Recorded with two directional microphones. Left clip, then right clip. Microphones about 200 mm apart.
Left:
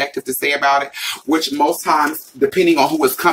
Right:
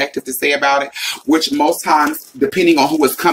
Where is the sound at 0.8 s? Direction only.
5° left (ahead or behind).